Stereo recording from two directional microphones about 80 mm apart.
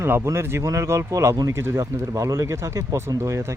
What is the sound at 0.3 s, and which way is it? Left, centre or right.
Speech, right.